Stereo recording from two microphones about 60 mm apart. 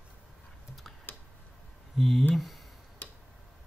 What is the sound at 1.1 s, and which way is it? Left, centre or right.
Tick-tock, left.